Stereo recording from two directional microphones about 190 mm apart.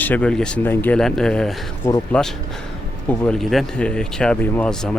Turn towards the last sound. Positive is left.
turn(degrees=5)  # may be behind; listen again after turning